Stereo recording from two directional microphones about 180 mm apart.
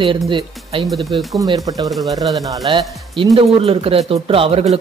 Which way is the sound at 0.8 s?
Centre (ahead or behind).